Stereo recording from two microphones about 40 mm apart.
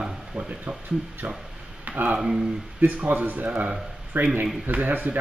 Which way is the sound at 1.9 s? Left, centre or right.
Right.